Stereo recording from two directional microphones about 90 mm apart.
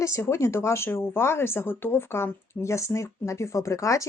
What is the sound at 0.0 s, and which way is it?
Speech, 30° left (ahead or behind).